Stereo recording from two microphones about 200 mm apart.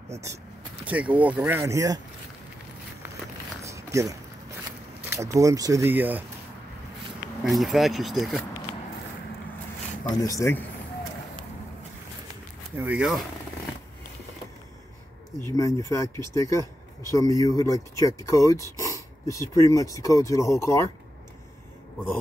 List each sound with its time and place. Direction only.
0.8 s speech: 5° right (ahead or behind)
3.6 s a sound: 15° right (ahead or behind)
5.1 s speech: 15° right (ahead or behind)
7.4 s speech: centre (ahead or behind)
10.2 s speech: 15° left (ahead or behind)
12.7 s speech: 5° right (ahead or behind)
15.4 s speech: 15° left (ahead or behind)